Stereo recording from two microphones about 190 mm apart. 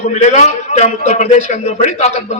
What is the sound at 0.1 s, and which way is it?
A man's voice, 35° left (ahead or behind).